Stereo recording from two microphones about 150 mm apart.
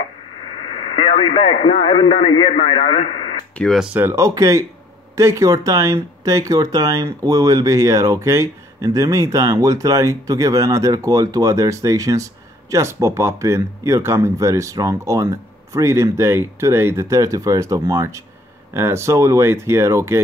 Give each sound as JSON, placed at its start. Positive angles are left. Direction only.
{"t": 0.9, "sound": "a man's voice", "side_deg": 40}
{"t": 3.5, "sound": "speech", "side_deg": 0}
{"t": 3.9, "sound": "speech", "side_deg": -15}